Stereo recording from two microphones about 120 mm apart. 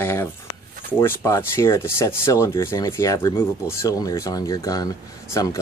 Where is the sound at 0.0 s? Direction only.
20° left (ahead or behind).